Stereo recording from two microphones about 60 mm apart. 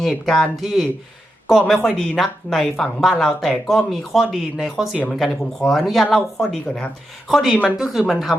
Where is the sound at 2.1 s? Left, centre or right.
Centre.